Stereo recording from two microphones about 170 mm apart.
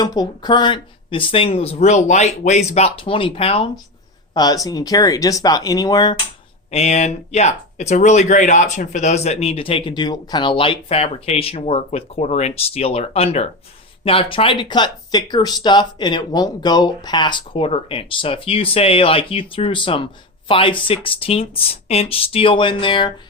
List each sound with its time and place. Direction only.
0.0 s speech: 25° left (ahead or behind)
4.4 s speech: 20° left (ahead or behind)
6.7 s speech: 40° left (ahead or behind)